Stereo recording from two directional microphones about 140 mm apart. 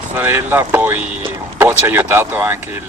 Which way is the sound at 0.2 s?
15° right (ahead or behind).